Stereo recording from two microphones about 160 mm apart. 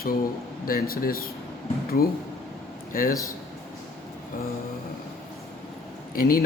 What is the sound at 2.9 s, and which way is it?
Speech, 60° left (ahead or behind).